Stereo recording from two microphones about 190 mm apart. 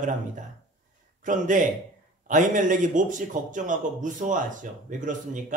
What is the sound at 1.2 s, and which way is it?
A man's voice, 40° right (ahead or behind).